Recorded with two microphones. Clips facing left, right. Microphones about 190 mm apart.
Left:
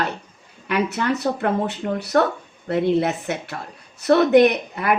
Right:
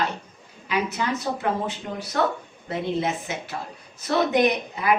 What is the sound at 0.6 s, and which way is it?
A woman's voice, 60° left (ahead or behind).